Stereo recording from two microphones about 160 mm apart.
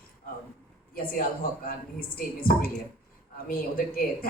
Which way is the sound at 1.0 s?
65° left (ahead or behind).